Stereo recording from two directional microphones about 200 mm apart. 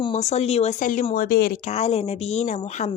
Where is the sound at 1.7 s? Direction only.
30° left (ahead or behind).